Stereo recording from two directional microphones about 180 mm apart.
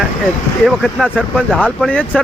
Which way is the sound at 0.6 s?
Centre (ahead or behind).